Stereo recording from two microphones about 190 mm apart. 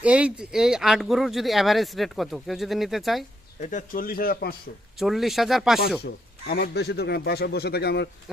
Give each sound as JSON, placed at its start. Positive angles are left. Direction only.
{"t": 0.0, "sound": "speech", "side_deg": -5}
{"t": 3.6, "sound": "a man's voice", "side_deg": 40}
{"t": 4.9, "sound": "speech", "side_deg": 0}
{"t": 6.0, "sound": "a man's voice", "side_deg": 55}